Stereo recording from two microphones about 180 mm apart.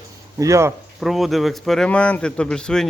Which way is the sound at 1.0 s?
Centre (ahead or behind).